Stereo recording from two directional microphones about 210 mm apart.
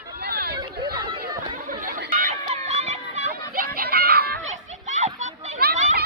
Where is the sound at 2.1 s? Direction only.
35° right (ahead or behind).